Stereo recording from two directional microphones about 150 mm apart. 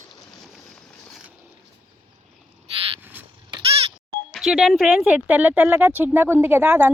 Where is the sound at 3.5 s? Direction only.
40° right (ahead or behind).